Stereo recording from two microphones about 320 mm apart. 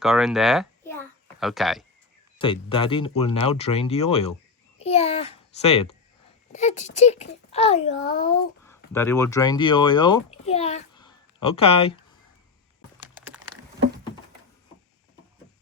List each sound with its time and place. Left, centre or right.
0.0 s speech: centre
2.4 s a child's voice: centre
8.9 s a child's voice: centre